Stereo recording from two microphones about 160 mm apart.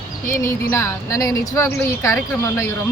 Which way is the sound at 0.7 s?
15° left (ahead or behind).